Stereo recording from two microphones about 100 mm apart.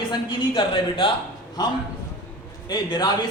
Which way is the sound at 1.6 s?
40° left (ahead or behind).